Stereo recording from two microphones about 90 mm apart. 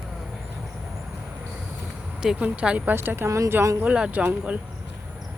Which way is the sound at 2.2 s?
10° right (ahead or behind).